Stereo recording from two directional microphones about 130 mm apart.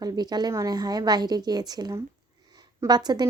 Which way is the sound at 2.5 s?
30° right (ahead or behind).